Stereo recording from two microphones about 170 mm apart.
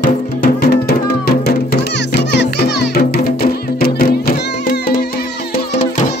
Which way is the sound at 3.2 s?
60° left (ahead or behind).